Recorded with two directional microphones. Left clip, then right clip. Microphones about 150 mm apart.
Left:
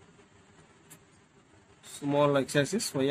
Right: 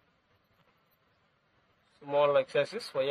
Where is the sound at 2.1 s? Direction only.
40° right (ahead or behind).